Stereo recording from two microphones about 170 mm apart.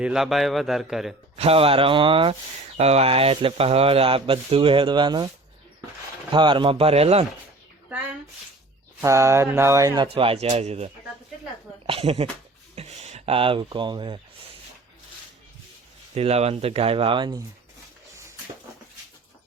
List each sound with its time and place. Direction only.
0.0 s a man's voice: 5° right (ahead or behind)
1.4 s speech: 35° right (ahead or behind)
6.3 s speech: 30° right (ahead or behind)
9.0 s speech: 15° right (ahead or behind)
16.1 s speech: 35° right (ahead or behind)